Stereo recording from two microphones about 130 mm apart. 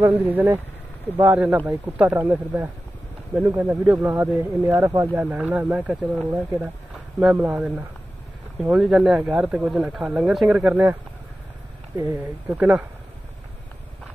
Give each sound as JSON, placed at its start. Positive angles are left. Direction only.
{"t": 0.0, "sound": "speech", "side_deg": -15}
{"t": 12.5, "sound": "speech", "side_deg": -15}